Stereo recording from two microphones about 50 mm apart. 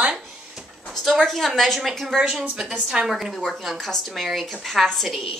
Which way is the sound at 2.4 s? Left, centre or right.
Centre.